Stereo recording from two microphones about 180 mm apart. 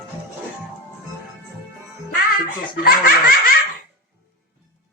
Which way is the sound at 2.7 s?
55° left (ahead or behind).